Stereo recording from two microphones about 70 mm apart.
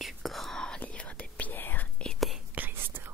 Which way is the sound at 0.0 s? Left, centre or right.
Centre.